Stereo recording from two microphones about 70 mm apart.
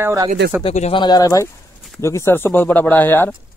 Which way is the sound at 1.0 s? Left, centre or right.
Left.